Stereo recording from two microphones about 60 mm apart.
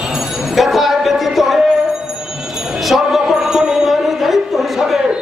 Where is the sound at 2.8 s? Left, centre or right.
Centre.